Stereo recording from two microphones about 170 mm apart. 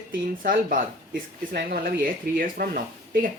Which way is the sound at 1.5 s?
60° right (ahead or behind).